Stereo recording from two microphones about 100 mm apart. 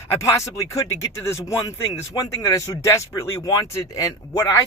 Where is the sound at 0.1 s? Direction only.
30° left (ahead or behind).